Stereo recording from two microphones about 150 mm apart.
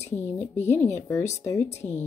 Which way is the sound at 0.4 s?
15° left (ahead or behind).